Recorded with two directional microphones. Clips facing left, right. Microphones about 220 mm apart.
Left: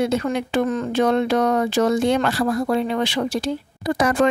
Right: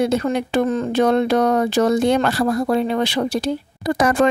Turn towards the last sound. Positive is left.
turn(degrees=-45)  # may be behind; listen again after turning